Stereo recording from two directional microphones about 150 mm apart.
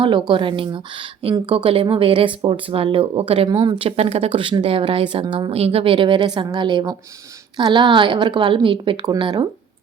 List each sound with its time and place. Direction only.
0.0 s speech: 35° right (ahead or behind)